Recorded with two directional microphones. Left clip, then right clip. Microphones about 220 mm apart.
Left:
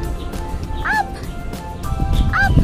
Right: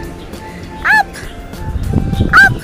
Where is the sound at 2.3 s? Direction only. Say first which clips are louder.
Right 11 dB; centre (ahead or behind).